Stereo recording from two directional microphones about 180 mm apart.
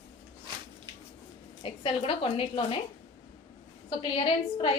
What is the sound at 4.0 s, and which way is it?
Speech, 30° left (ahead or behind).